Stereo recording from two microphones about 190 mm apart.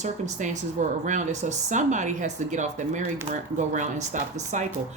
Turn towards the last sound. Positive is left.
turn(degrees=-40)  # may be behind; listen again after turning